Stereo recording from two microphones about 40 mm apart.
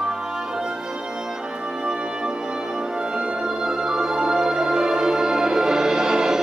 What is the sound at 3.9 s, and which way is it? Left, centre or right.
Music, centre.